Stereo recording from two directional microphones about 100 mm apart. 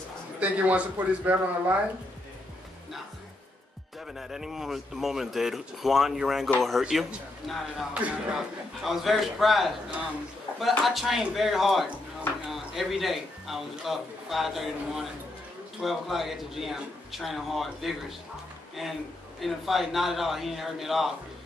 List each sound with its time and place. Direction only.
0.4 s a man's voice: 15° right (ahead or behind)
4.2 s a man's voice: 5° right (ahead or behind)
19.4 s a man's voice: centre (ahead or behind)